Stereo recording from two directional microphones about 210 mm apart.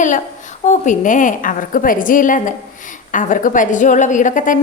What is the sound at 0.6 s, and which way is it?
A woman's voice, 35° left (ahead or behind).